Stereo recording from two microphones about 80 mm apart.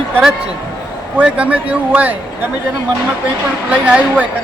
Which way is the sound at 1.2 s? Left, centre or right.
Centre.